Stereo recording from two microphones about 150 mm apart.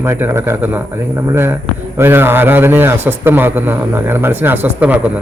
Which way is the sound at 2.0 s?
15° right (ahead or behind).